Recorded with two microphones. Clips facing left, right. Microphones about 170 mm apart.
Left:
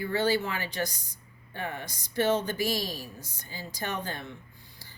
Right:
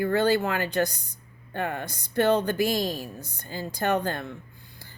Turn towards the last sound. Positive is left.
turn(degrees=-60)  # may be behind; listen again after turning